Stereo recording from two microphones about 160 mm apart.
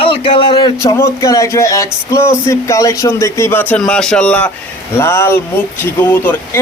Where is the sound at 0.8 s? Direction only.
20° left (ahead or behind).